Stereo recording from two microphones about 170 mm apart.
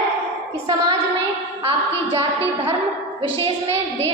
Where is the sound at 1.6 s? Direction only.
35° right (ahead or behind).